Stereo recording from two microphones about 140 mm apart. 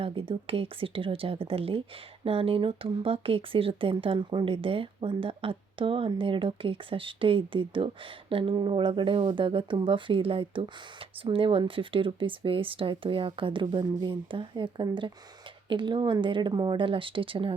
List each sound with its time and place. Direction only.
0.0 s speech: 40° right (ahead or behind)